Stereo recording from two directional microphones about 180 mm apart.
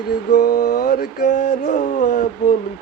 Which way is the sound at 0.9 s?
45° left (ahead or behind).